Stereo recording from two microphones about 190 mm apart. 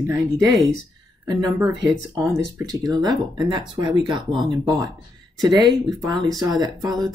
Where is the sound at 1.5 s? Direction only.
15° right (ahead or behind).